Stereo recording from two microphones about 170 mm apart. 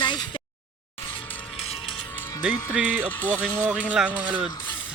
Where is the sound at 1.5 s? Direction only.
35° left (ahead or behind).